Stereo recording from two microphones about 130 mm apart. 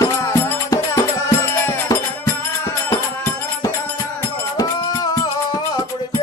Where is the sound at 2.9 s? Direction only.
25° left (ahead or behind).